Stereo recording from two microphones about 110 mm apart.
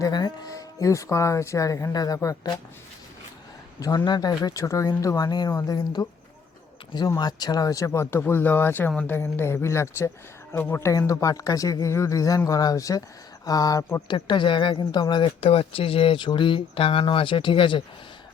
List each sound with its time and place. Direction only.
0.0 s speech: 40° left (ahead or behind)
3.8 s speech: 35° left (ahead or behind)
7.2 s speech: 40° left (ahead or behind)
14.1 s speech: 45° left (ahead or behind)
15.4 s speech: 60° left (ahead or behind)